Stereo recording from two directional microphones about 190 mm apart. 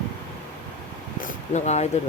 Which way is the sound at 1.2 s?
40° left (ahead or behind).